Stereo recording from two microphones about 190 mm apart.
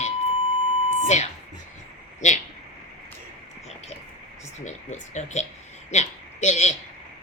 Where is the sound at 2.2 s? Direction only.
40° left (ahead or behind).